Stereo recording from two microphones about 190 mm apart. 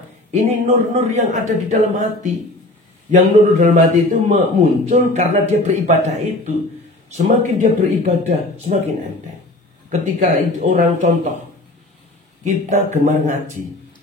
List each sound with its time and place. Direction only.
0.3 s a man's voice: 35° right (ahead or behind)
9.8 s speech: 40° right (ahead or behind)
12.4 s a man's voice: 40° right (ahead or behind)